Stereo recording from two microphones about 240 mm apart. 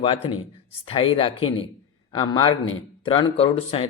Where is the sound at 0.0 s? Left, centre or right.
Left.